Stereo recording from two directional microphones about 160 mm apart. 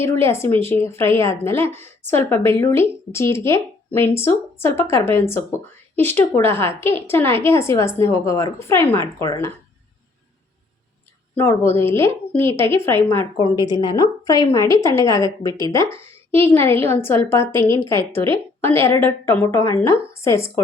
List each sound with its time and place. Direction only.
0.0 s a woman's voice: 15° left (ahead or behind)
1.6 s a woman's voice: 40° right (ahead or behind)
2.0 s a woman's voice: 15° left (ahead or behind)
11.3 s a woman's voice: 15° left (ahead or behind)
13.4 s a woman's voice: 25° left (ahead or behind)